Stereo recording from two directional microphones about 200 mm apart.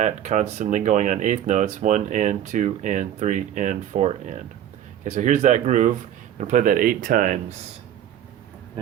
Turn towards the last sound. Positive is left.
turn(degrees=-45)  # may be behind; listen again after turning